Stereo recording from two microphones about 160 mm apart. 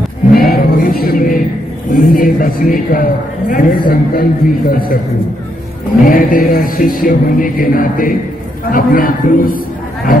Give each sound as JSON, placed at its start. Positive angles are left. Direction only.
{"t": 0.4, "sound": "music", "side_deg": 65}
{"t": 1.9, "sound": "a woman's voice", "side_deg": 60}
{"t": 6.0, "sound": "a woman's voice", "side_deg": 60}